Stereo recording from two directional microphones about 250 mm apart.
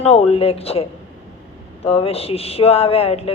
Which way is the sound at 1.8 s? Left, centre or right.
Left.